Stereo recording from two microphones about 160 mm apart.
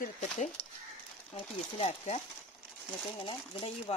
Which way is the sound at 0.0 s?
45° left (ahead or behind).